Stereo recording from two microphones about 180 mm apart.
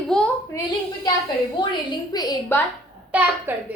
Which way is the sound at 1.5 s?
25° left (ahead or behind).